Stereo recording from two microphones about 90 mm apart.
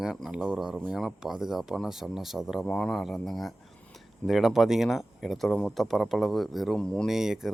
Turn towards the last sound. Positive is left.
turn(degrees=-5)  # may be behind; listen again after turning